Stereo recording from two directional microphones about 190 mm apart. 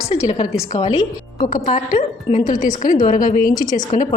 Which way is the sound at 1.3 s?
40° left (ahead or behind).